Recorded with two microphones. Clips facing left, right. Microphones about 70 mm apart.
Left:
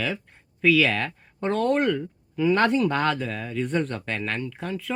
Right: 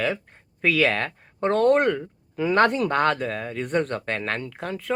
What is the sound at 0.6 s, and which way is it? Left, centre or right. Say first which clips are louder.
Speech: left 1 dB; right.